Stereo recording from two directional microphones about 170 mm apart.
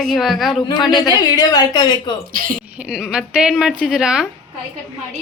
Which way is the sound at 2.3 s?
55° right (ahead or behind).